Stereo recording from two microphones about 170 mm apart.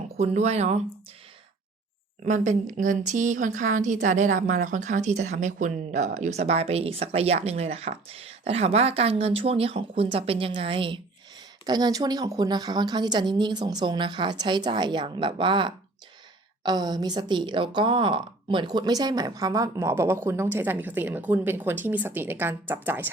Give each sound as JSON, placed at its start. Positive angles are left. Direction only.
{"t": 0.2, "sound": "speech", "side_deg": -40}
{"t": 2.2, "sound": "a woman's voice", "side_deg": -45}